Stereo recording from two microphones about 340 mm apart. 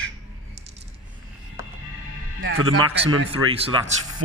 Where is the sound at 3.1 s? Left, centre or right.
Right.